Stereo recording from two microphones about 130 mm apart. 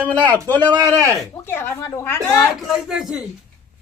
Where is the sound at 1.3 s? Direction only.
20° left (ahead or behind).